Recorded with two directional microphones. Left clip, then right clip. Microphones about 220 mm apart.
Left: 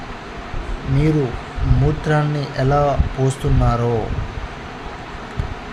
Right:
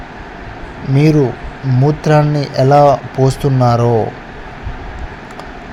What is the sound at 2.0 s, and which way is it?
Speech, 30° right (ahead or behind).